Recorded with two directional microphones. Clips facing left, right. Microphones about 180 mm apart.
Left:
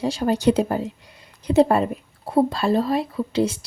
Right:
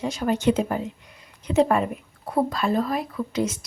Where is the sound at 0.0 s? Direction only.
35° left (ahead or behind).